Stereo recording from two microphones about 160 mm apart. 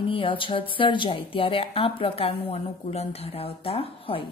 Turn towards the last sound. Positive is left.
turn(degrees=35)  # may be behind; listen again after turning